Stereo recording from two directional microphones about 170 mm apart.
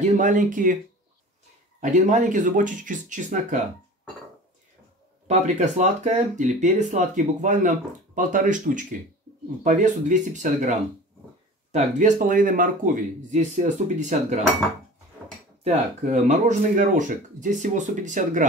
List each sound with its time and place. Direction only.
0.2 s speech: 50° right (ahead or behind)
1.8 s speech: 45° right (ahead or behind)
5.3 s speech: 45° right (ahead or behind)
15.6 s speech: 45° right (ahead or behind)